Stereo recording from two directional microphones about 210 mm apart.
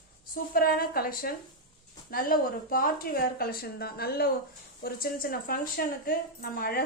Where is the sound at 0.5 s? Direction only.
45° left (ahead or behind).